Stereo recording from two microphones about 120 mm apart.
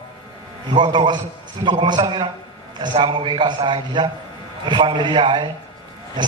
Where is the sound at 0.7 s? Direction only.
40° right (ahead or behind).